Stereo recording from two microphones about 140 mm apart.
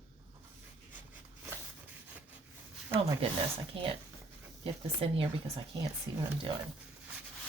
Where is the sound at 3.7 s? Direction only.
40° right (ahead or behind).